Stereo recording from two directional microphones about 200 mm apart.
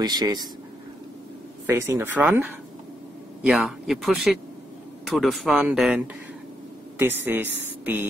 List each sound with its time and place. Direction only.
0.0 s speech: 20° right (ahead or behind)
1.7 s speech: 10° right (ahead or behind)
3.4 s speech: centre (ahead or behind)